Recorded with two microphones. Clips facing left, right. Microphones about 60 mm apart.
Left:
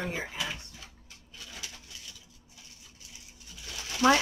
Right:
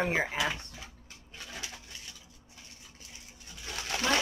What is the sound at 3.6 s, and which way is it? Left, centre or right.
Pigeon, right.